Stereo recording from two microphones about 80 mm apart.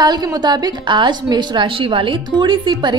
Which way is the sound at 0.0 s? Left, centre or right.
Right.